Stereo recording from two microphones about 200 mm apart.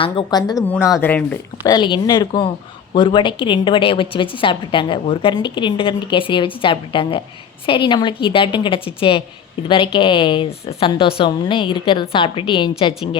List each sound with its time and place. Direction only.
0.0 s a woman's voice: 25° left (ahead or behind)
0.5 s a woman's voice: centre (ahead or behind)
1.0 s speech: 10° left (ahead or behind)
1.7 s a woman's voice: 20° left (ahead or behind)